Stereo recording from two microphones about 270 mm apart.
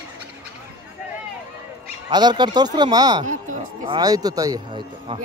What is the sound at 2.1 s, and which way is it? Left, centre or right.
A man's voice, centre.